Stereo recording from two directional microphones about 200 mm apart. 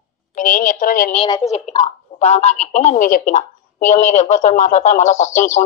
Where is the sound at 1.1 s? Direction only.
25° left (ahead or behind).